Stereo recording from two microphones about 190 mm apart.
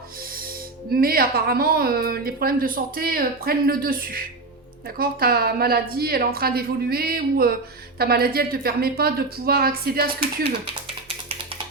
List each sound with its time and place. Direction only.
1.0 s speech: 50° right (ahead or behind)